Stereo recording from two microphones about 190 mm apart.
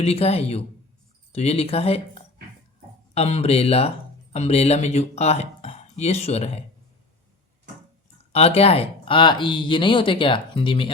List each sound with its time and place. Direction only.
0.0 s speech: 30° left (ahead or behind)
8.3 s speech: 35° left (ahead or behind)